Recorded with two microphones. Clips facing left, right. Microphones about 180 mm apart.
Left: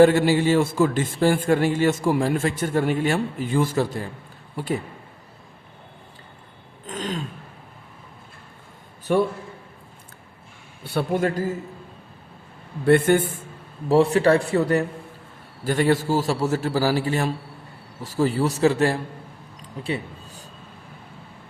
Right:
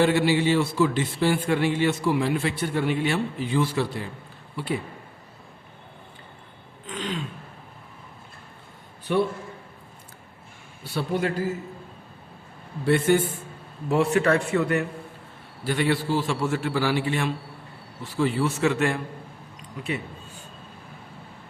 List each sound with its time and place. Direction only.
0.0 s a man's voice: 45° left (ahead or behind)
6.8 s throat clearing: 45° left (ahead or behind)
9.1 s a man's voice: 45° left (ahead or behind)
10.8 s a man's voice: 50° left (ahead or behind)
12.8 s a man's voice: 55° left (ahead or behind)
13.8 s a man's voice: 35° left (ahead or behind)
19.8 s a sound: 30° left (ahead or behind)